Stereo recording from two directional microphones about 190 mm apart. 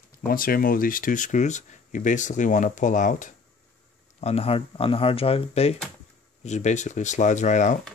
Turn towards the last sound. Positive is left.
turn(degrees=40)  # may be behind; listen again after turning